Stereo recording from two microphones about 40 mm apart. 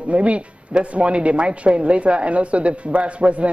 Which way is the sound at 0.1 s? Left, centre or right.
Right.